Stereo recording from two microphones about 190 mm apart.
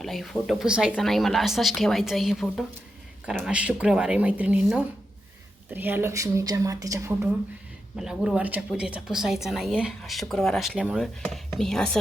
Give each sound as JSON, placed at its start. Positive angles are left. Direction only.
{"t": 0.0, "sound": "speech", "side_deg": 0}
{"t": 7.9, "sound": "speech", "side_deg": 0}